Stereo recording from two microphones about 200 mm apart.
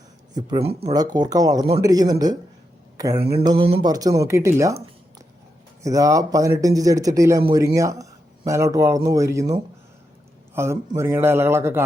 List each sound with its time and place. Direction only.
0.3 s speech: 20° right (ahead or behind)
0.9 s speech: 20° right (ahead or behind)
5.8 s speech: 15° right (ahead or behind)